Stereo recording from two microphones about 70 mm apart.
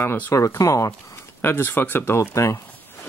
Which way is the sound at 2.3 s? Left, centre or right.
Left.